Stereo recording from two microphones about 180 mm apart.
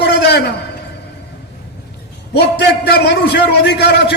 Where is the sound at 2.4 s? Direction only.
65° left (ahead or behind).